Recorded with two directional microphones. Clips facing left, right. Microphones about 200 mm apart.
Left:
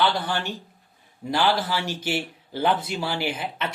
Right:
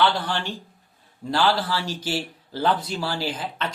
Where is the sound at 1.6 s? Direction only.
25° left (ahead or behind).